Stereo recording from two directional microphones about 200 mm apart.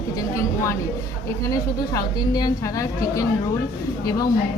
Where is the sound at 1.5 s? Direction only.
20° left (ahead or behind).